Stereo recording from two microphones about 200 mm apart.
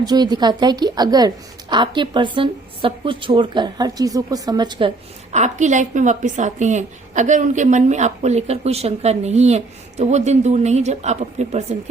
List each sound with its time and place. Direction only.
0.0 s a woman's voice: 20° right (ahead or behind)
5.3 s a woman's voice: 35° right (ahead or behind)